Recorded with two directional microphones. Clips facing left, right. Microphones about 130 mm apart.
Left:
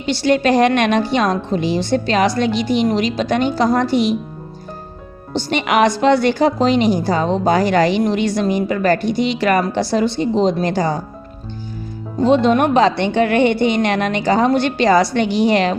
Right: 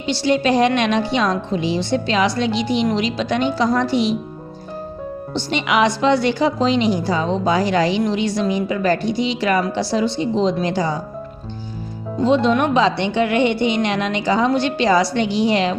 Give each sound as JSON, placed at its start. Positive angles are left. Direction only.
{"t": 0.0, "sound": "a woman's voice", "side_deg": 50}
{"t": 5.3, "sound": "a woman's voice", "side_deg": 50}
{"t": 12.2, "sound": "a woman's voice", "side_deg": 55}